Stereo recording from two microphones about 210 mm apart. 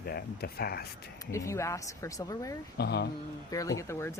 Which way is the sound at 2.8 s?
50° left (ahead or behind).